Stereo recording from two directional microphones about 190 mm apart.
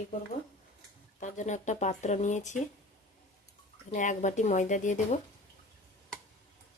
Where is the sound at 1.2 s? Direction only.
40° left (ahead or behind).